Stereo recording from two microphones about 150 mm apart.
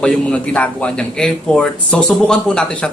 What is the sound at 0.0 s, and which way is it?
A man's voice, 5° left (ahead or behind).